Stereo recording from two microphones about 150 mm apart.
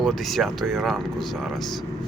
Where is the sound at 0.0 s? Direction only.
Centre (ahead or behind).